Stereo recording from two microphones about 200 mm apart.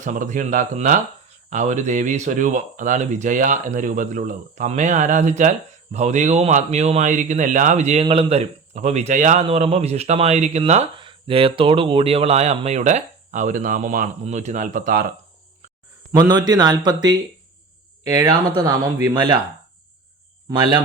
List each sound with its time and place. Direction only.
0.0 s speech: 40° right (ahead or behind)
16.1 s speech: 20° right (ahead or behind)